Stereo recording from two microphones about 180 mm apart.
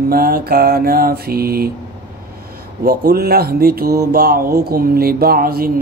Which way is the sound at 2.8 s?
55° right (ahead or behind).